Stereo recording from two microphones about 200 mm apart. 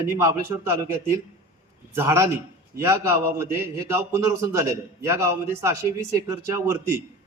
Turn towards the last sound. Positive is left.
turn(degrees=-10)  # may be behind; listen again after turning